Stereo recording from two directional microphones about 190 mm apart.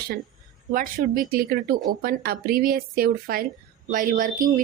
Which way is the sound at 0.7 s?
45° right (ahead or behind).